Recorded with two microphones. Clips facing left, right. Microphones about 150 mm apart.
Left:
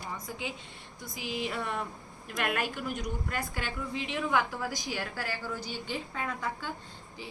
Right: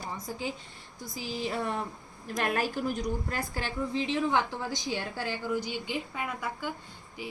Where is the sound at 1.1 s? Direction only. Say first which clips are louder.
Right 1 dB; 35° right (ahead or behind).